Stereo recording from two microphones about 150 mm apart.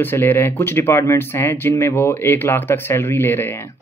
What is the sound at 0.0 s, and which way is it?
Speech, 15° left (ahead or behind).